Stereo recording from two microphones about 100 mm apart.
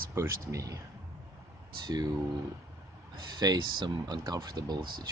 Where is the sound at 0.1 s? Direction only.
30° right (ahead or behind).